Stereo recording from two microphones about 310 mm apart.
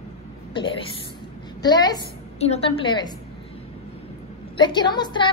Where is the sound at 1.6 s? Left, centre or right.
Centre.